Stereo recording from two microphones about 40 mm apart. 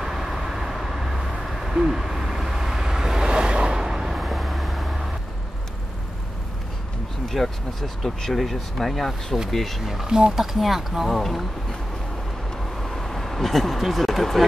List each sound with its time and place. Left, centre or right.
0.0 s vehicle: centre
7.2 s speech: centre
10.0 s speech: centre
10.4 s speech: centre
12.8 s vehicle: centre